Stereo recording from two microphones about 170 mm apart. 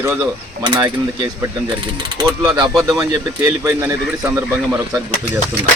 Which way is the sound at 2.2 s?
25° right (ahead or behind).